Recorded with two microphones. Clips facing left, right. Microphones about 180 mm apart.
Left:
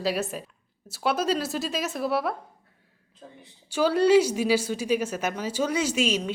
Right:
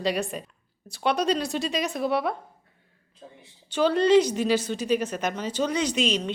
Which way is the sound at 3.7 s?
10° left (ahead or behind).